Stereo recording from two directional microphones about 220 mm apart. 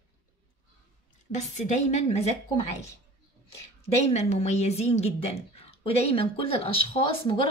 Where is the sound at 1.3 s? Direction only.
30° left (ahead or behind).